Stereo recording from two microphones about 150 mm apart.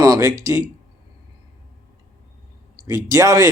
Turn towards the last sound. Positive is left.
turn(degrees=-20)  # may be behind; listen again after turning